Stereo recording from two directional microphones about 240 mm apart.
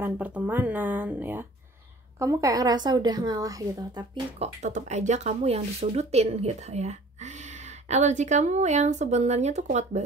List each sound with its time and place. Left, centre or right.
0.0 s speech: centre; by 10.0 s right